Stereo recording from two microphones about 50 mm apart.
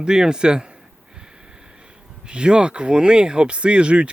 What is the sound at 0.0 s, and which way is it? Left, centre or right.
Speech, centre.